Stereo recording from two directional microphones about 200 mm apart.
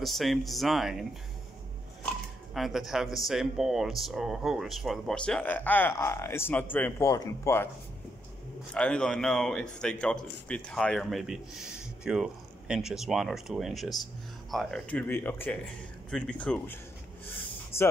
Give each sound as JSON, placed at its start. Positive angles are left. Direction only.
{"t": 0.0, "sound": "speech", "side_deg": 0}
{"t": 2.0, "sound": "speech", "side_deg": 0}
{"t": 8.7, "sound": "speech", "side_deg": 5}
{"t": 17.7, "sound": "speech", "side_deg": 30}